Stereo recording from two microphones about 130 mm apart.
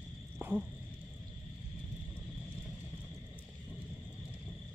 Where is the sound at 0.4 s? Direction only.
15° right (ahead or behind).